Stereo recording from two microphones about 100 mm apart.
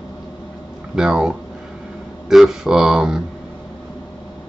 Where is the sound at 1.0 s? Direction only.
5° right (ahead or behind).